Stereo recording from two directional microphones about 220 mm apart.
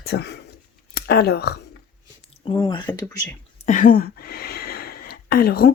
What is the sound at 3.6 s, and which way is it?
Speech, 35° left (ahead or behind).